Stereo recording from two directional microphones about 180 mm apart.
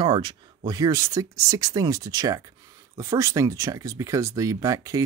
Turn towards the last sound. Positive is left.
turn(degrees=-20)  # may be behind; listen again after turning